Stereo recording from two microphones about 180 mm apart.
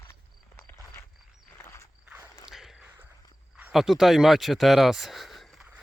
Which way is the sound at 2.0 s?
10° right (ahead or behind).